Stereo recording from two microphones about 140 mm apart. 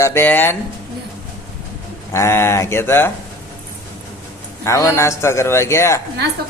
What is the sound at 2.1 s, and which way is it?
Speech, 20° left (ahead or behind).